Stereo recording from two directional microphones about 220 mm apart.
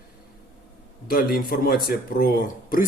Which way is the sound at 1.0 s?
40° left (ahead or behind).